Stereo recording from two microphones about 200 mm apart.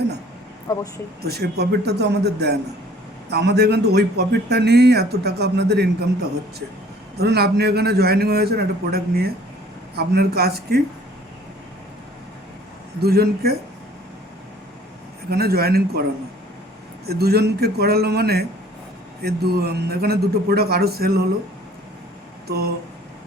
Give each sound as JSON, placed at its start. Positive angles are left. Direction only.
{"t": 0.7, "sound": "speech", "side_deg": 15}
{"t": 1.2, "sound": "a man's voice", "side_deg": -55}
{"t": 7.2, "sound": "a man's voice", "side_deg": -55}
{"t": 13.0, "sound": "a man's voice", "side_deg": -50}
{"t": 15.3, "sound": "a man's voice", "side_deg": -50}
{"t": 17.1, "sound": "a man's voice", "side_deg": -50}
{"t": 22.4, "sound": "speech", "side_deg": -50}